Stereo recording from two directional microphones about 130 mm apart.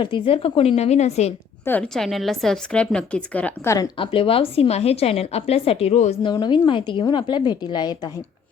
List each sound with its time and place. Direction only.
0.0 s a woman's voice: 45° left (ahead or behind)
1.6 s a woman's voice: 15° left (ahead or behind)
2.0 s a woman's voice: centre (ahead or behind)
3.9 s a woman's voice: 45° left (ahead or behind)
6.2 s a woman's voice: 35° left (ahead or behind)